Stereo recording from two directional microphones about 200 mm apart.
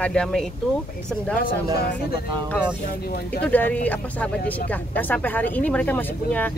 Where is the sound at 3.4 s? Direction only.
10° left (ahead or behind).